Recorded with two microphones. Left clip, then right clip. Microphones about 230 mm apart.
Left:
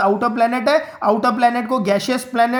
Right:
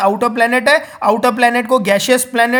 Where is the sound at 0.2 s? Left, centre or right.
Right.